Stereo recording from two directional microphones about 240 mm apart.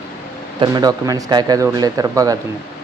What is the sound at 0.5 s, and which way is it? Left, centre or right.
Speech, centre.